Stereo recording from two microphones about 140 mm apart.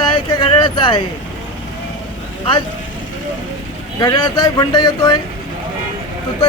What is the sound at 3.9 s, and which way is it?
Speech, 30° left (ahead or behind).